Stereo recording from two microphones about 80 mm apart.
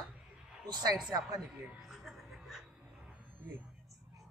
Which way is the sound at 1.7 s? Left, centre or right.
Centre.